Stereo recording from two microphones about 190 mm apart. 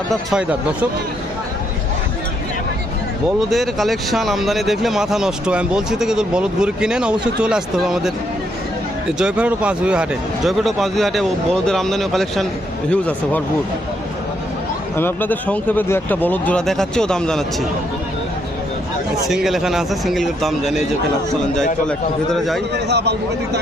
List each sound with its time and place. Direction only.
0.1 s speech: centre (ahead or behind)
3.5 s speech: centre (ahead or behind)
9.1 s speech: 5° right (ahead or behind)
14.9 s speech: 10° left (ahead or behind)
19.3 s speech: centre (ahead or behind)
21.8 s speech: centre (ahead or behind)
22.7 s a man's voice: 60° right (ahead or behind)